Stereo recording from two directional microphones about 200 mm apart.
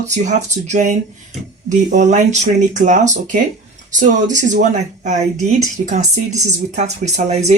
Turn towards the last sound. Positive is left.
turn(degrees=-35)  # may be behind; listen again after turning